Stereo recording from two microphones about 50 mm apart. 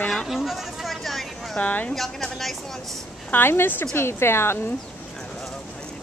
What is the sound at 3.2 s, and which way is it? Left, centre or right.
A woman's voice, left.